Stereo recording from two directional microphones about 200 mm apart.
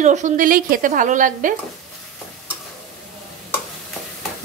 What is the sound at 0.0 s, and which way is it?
A woman's voice, 35° right (ahead or behind).